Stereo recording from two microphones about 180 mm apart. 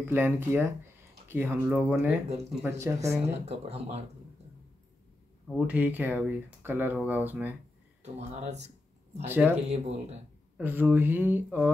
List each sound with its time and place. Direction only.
0.0 s speech: 10° right (ahead or behind)
3.4 s speech: 35° right (ahead or behind)
5.7 s speech: 10° right (ahead or behind)
8.0 s speech: 40° right (ahead or behind)
9.3 s speech: 10° right (ahead or behind)
9.7 s speech: 35° right (ahead or behind)
10.6 s speech: 10° right (ahead or behind)